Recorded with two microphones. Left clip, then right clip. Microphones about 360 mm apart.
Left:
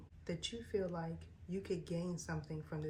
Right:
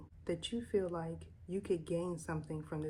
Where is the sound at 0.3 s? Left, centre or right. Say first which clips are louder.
Right 4 dB; centre.